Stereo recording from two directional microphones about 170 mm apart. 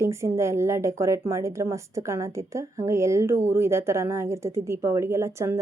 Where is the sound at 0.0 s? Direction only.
15° right (ahead or behind).